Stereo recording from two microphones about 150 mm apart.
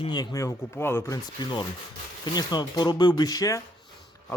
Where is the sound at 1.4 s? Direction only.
30° left (ahead or behind).